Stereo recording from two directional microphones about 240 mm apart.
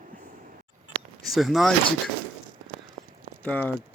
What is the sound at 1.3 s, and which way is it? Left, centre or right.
Speech, centre.